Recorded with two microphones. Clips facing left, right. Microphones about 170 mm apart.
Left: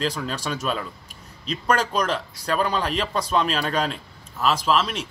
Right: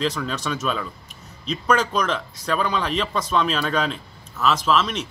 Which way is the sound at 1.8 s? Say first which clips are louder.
Even; 35° left (ahead or behind).